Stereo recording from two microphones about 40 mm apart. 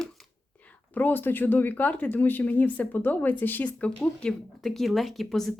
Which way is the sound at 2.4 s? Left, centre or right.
Left.